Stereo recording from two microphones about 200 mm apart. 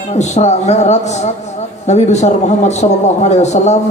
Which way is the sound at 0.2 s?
35° left (ahead or behind).